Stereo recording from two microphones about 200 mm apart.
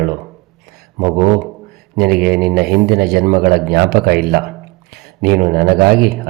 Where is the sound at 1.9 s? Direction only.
50° right (ahead or behind).